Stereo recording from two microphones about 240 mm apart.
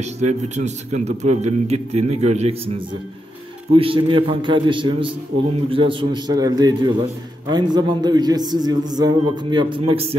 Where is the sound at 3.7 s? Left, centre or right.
Right.